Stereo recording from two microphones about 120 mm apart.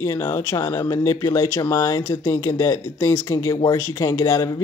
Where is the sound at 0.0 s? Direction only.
25° left (ahead or behind).